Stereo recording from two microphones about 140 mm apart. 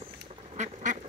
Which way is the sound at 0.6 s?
60° right (ahead or behind).